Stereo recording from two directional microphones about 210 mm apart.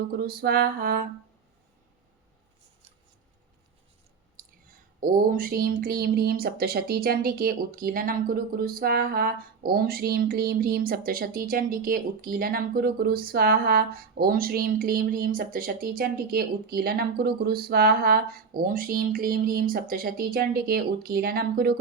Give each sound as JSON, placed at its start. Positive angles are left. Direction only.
{"t": 0.2, "sound": "speech", "side_deg": -50}
{"t": 4.9, "sound": "speech", "side_deg": -45}